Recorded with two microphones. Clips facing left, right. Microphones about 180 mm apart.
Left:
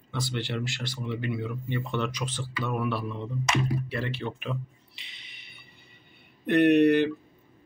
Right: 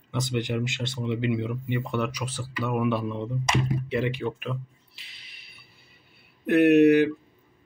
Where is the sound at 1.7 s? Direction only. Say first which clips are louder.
Right 2 dB; 10° right (ahead or behind).